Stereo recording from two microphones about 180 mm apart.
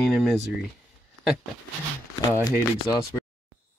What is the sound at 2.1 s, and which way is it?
Speech, 20° left (ahead or behind).